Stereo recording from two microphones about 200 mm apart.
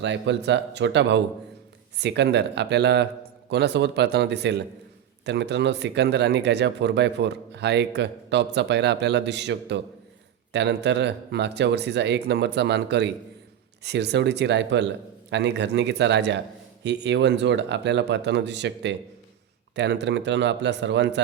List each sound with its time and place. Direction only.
0.0 s speech: 60° right (ahead or behind)